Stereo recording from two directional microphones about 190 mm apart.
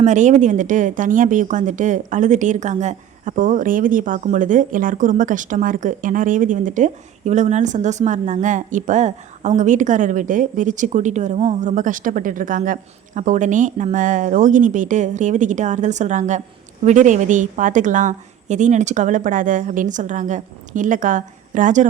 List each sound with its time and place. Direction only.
0.0 s speech: 40° right (ahead or behind)